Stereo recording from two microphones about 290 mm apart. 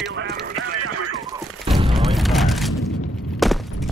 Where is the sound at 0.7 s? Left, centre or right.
Right.